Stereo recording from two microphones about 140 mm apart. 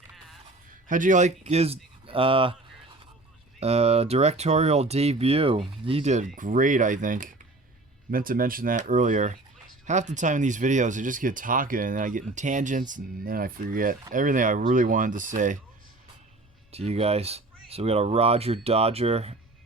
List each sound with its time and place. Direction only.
0.9 s speech: 70° right (ahead or behind); by 2.6 s 40° right (ahead or behind)
3.6 s speech: 45° right (ahead or behind); by 7.3 s 70° right (ahead or behind)
8.1 s speech: 90° right
14.1 s speech: 70° right (ahead or behind)
16.7 s speech: 45° right (ahead or behind)